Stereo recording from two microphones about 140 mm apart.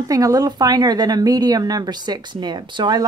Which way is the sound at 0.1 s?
25° right (ahead or behind).